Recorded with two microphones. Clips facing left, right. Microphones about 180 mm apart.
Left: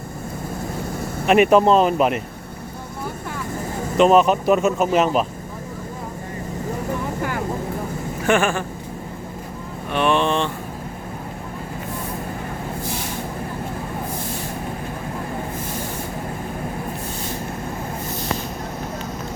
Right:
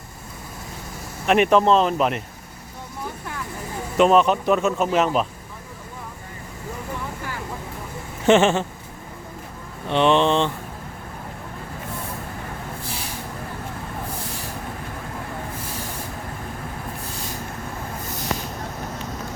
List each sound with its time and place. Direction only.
1.3 s speech: 5° left (ahead or behind)
3.9 s speech: centre (ahead or behind)
7.2 s vehicle: 50° left (ahead or behind)
8.3 s speech: 25° right (ahead or behind)
9.9 s speech: 20° right (ahead or behind)